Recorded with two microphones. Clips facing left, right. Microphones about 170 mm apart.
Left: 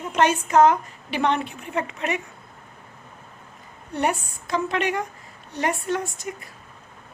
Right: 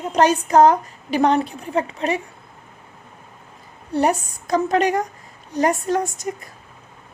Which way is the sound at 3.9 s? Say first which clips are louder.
Right 5 dB; 40° right (ahead or behind).